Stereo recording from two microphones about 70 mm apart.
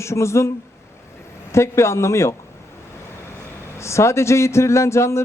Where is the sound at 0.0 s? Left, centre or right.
Left.